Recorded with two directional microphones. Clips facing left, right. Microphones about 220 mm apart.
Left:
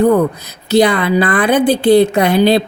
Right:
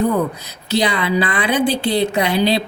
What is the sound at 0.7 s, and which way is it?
Speech, 50° left (ahead or behind).